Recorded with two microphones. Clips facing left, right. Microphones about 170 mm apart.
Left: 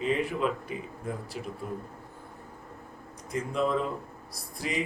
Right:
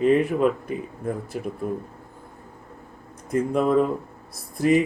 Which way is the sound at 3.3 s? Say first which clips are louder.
Right 7 dB; 55° right (ahead or behind).